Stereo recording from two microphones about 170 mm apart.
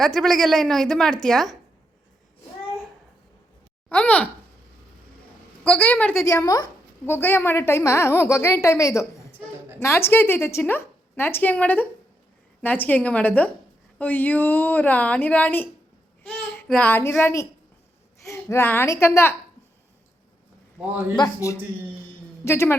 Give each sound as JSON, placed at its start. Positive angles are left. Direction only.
{"t": 0.0, "sound": "a woman's voice", "side_deg": 0}
{"t": 3.8, "sound": "a sound", "side_deg": 10}
{"t": 5.6, "sound": "a woman's voice", "side_deg": 10}
{"t": 16.2, "sound": "child singing", "side_deg": 10}
{"t": 17.2, "sound": "a woman's voice", "side_deg": 10}
{"t": 21.2, "sound": "a man's voice", "side_deg": 20}